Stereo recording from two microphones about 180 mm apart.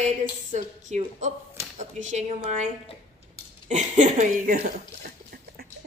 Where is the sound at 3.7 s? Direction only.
45° right (ahead or behind).